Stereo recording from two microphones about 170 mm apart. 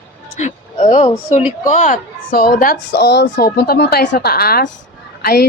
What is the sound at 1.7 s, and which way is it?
A woman's voice, 45° left (ahead or behind).